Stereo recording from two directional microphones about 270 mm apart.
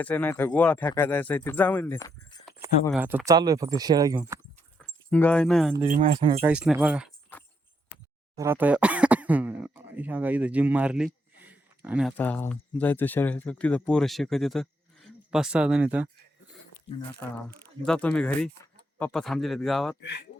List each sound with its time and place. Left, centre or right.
0.0 s speech: centre
2.9 s speech: centre
5.1 s speech: centre
5.9 s speech: right
6.4 s speech: centre
8.4 s speech: centre
17.8 s speech: centre
20.0 s speech: left